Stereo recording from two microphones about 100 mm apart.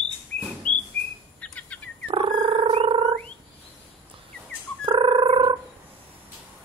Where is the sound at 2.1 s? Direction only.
60° right (ahead or behind).